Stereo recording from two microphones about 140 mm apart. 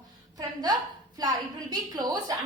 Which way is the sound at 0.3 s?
30° right (ahead or behind).